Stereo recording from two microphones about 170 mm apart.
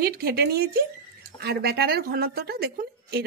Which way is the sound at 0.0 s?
65° right (ahead or behind).